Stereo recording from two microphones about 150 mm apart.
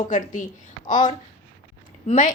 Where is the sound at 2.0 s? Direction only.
60° left (ahead or behind).